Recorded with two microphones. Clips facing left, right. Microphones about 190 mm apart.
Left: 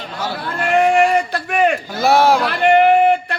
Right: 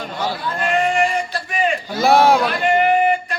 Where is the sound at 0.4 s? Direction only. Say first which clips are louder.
Left 5 dB; 60° left (ahead or behind).